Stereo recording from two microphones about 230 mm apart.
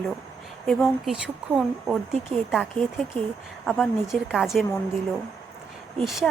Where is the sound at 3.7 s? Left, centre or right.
Centre.